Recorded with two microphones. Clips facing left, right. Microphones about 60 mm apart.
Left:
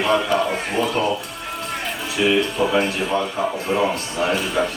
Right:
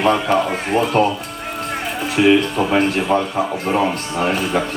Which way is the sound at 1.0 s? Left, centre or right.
Right.